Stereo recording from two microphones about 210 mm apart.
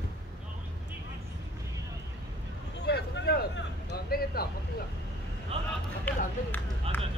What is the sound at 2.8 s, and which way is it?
Vehicle, 55° left (ahead or behind).